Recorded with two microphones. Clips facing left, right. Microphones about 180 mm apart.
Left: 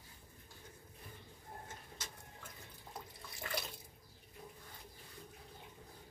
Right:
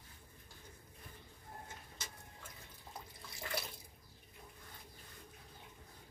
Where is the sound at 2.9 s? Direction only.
Centre (ahead or behind).